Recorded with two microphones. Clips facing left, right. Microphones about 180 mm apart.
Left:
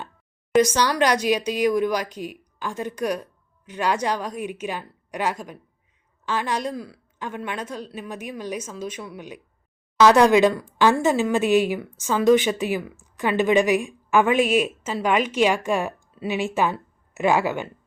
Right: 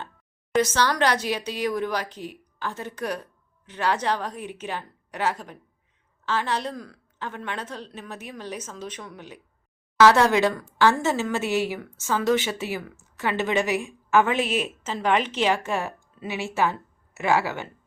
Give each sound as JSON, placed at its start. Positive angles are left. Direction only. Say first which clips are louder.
{"t": 0.5, "sound": "a woman's voice", "louder": "left 3 dB", "side_deg": 15}